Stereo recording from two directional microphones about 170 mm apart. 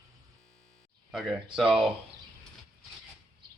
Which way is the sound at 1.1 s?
Centre (ahead or behind).